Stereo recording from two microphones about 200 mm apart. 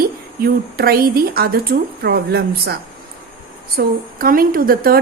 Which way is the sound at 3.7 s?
45° right (ahead or behind).